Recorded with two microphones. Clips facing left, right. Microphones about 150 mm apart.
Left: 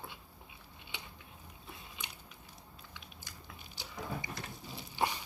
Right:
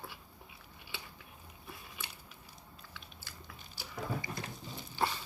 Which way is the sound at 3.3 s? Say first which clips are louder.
Right 1 dB; 15° left (ahead or behind).